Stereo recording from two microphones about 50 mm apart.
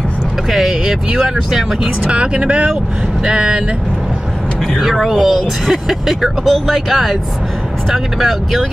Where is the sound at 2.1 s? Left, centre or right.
Right.